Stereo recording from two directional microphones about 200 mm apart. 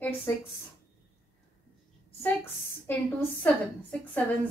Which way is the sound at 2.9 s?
10° left (ahead or behind).